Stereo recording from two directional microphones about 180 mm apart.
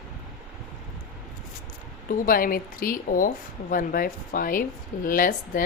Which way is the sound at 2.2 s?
50° left (ahead or behind).